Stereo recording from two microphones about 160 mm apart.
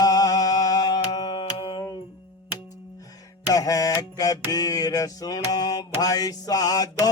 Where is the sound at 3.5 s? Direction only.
20° left (ahead or behind).